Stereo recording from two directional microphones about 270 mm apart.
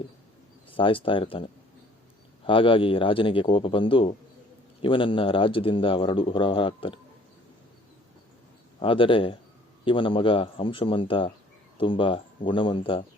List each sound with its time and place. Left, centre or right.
0.8 s speech: centre
2.5 s speech: centre
8.8 s speech: centre